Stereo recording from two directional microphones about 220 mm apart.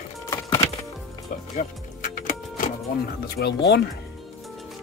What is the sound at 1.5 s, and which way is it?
Music, 35° left (ahead or behind).